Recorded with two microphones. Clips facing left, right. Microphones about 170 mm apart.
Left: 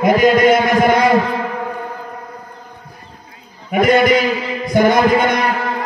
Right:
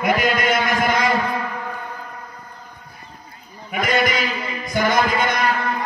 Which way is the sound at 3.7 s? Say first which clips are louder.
Left 9 dB; 55° left (ahead or behind).